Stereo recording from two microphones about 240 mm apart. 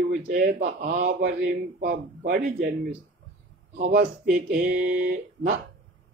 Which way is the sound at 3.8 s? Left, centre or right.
Right.